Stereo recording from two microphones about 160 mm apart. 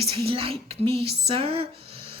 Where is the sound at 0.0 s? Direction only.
35° right (ahead or behind).